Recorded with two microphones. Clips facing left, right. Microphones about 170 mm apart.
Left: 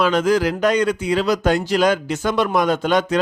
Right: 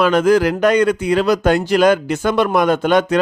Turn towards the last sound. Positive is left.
turn(degrees=-55)  # may be behind; listen again after turning